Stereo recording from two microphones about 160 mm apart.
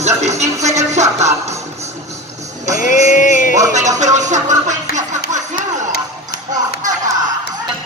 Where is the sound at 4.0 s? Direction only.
50° right (ahead or behind).